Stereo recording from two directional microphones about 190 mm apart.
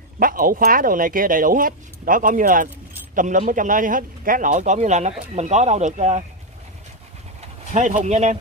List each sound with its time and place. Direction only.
0.2 s a man's voice: 50° right (ahead or behind)
7.7 s a man's voice: 40° right (ahead or behind)